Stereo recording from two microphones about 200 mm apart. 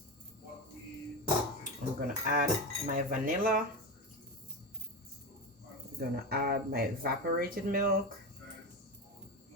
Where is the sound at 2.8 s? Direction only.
45° right (ahead or behind).